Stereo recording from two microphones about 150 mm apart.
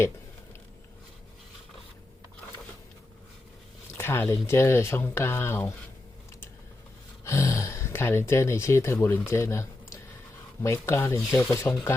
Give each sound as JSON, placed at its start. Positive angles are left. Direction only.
{"t": 3.9, "sound": "speech", "side_deg": 15}
{"t": 7.3, "sound": "speech", "side_deg": 20}